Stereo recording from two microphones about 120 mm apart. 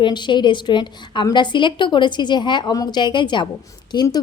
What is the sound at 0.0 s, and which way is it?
A woman's voice, 40° left (ahead or behind).